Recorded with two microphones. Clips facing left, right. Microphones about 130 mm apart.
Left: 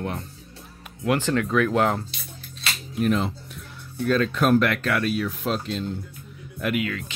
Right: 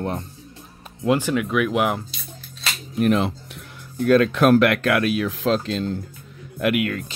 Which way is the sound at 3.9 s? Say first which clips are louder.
Right 6 dB; 60° right (ahead or behind).